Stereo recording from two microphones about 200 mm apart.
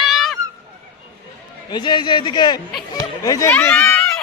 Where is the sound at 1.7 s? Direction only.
20° left (ahead or behind).